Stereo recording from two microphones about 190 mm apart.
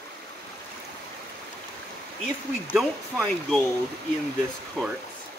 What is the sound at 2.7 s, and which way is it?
Speech, centre (ahead or behind).